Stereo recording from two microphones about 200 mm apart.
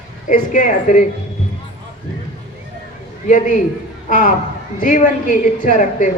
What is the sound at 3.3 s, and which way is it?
A woman's voice, 40° left (ahead or behind).